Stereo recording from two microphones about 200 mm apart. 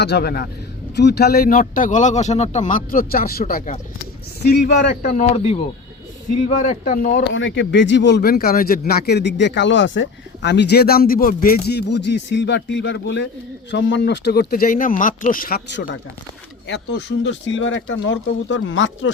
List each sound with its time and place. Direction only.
0.0 s a man's voice: 55° left (ahead or behind)
5.1 s speech: 30° left (ahead or behind)
6.6 s speech: 40° left (ahead or behind)
7.3 s a man's voice: 70° left (ahead or behind)